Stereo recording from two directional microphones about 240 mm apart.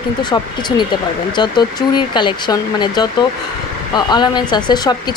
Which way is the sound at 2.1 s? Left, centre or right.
Centre.